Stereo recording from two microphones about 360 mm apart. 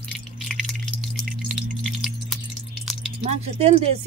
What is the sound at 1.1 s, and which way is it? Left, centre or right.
Sine wave, centre.